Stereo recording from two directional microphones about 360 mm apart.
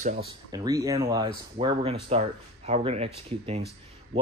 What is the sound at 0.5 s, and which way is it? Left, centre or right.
Speech, centre.